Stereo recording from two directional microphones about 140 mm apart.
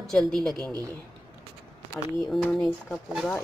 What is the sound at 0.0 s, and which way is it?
Speech, 5° left (ahead or behind).